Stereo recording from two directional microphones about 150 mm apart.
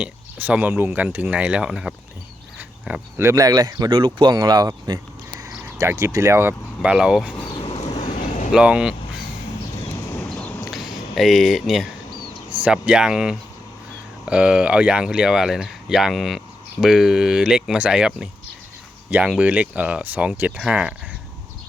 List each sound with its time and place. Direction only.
0.0 s speech: 10° right (ahead or behind)
2.6 s a sound: 10° right (ahead or behind)
3.2 s speech: 25° right (ahead or behind)
6.8 s speech: 5° right (ahead or behind)
7.5 s vehicle: 40° left (ahead or behind)
8.1 s a sound: 50° left (ahead or behind)
8.5 s speech: 5° right (ahead or behind)
10.2 s a sound: centre (ahead or behind)
11.1 s speech: centre (ahead or behind)